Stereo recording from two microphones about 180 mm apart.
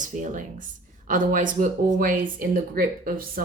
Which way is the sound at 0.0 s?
45° right (ahead or behind).